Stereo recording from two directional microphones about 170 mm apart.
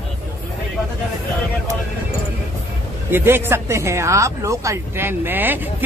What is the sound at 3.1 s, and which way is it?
Speech, 10° right (ahead or behind).